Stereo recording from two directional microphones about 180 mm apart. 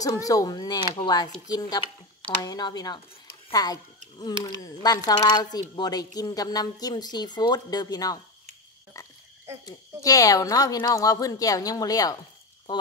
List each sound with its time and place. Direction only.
0.0 s speech: 20° left (ahead or behind)
9.0 s frog: 20° left (ahead or behind)
10.0 s speech: 20° left (ahead or behind)